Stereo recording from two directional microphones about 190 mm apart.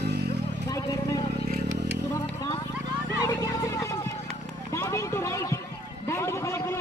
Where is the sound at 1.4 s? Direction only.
60° right (ahead or behind).